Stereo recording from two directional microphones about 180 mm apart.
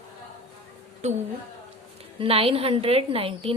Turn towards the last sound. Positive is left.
turn(degrees=-30)  # may be behind; listen again after turning